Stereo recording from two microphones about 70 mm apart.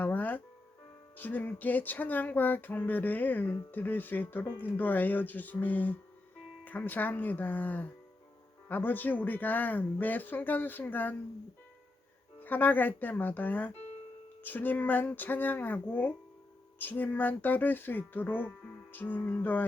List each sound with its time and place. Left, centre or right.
0.0 s music: left
1.1 s speech: left
12.4 s speech: left